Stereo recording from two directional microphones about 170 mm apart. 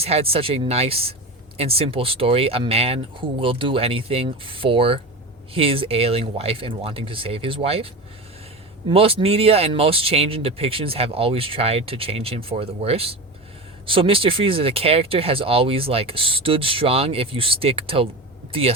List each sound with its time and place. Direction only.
0.0 s speech: 35° right (ahead or behind)
8.9 s speech: 35° right (ahead or behind)